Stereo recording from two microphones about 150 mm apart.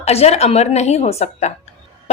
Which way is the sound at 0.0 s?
45° left (ahead or behind).